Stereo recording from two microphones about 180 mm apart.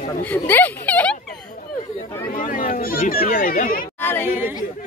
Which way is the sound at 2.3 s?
50° left (ahead or behind).